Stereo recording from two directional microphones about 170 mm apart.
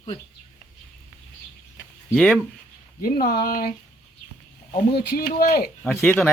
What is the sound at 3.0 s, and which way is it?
Speech, 60° left (ahead or behind).